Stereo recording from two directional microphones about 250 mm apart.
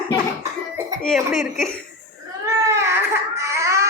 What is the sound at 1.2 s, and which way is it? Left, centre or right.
Speech, centre.